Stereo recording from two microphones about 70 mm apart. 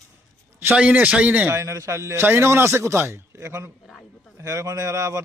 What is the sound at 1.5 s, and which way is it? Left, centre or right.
A man's voice, right.